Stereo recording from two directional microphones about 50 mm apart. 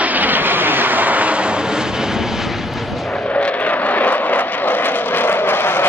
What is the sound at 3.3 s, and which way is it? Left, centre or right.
Vehicle, left.